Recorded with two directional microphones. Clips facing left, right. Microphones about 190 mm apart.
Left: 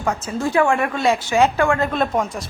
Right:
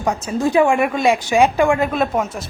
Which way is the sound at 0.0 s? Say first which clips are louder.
Right 3 dB; 15° right (ahead or behind).